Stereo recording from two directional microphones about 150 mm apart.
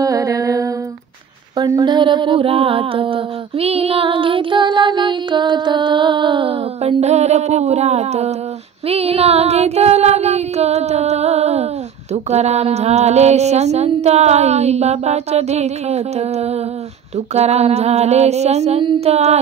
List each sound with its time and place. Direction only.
0.0 s music: 25° right (ahead or behind)
1.6 s a sound: 30° right (ahead or behind); by 8.4 s 45° right (ahead or behind)
8.8 s child singing: 40° right (ahead or behind)